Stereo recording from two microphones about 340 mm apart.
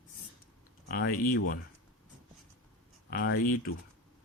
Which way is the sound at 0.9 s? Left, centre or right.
Left.